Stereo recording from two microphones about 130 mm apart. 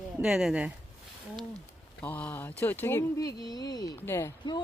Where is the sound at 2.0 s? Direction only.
10° left (ahead or behind); by 3.9 s 30° left (ahead or behind).